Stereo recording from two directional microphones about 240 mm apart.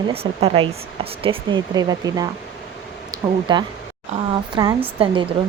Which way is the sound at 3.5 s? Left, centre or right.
Centre.